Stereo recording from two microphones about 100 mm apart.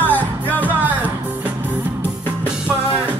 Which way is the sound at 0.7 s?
15° right (ahead or behind).